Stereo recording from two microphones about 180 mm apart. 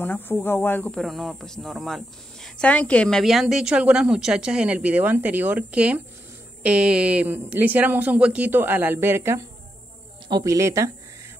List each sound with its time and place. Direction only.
0.0 s speech: 10° left (ahead or behind); by 10.9 s 15° right (ahead or behind)